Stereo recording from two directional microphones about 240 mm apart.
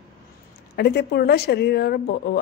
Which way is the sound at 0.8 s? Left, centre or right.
Left.